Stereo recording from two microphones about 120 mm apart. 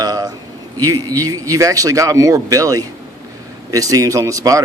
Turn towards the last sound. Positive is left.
turn(degrees=-30)  # may be behind; listen again after turning